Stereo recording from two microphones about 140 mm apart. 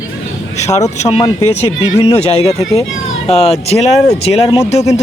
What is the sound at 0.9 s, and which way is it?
Speech, 45° left (ahead or behind).